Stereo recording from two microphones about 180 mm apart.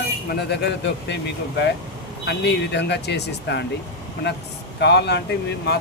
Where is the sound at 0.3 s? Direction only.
70° left (ahead or behind).